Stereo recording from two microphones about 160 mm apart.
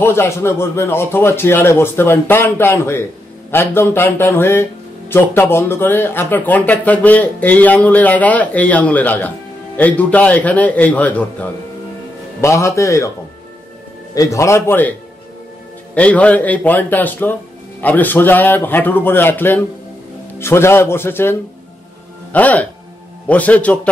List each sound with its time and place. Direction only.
0.0 s a man's voice: 15° left (ahead or behind)
14.1 s speech: 20° left (ahead or behind)